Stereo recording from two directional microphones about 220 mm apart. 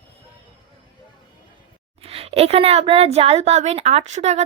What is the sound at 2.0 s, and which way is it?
Speech, 25° right (ahead or behind).